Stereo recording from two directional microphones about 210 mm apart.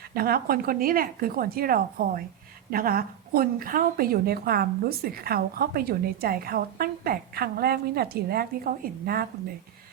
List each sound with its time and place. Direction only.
0.1 s a woman's voice: 45° right (ahead or behind)